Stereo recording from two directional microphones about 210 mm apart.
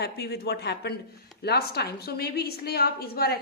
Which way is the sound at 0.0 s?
50° left (ahead or behind).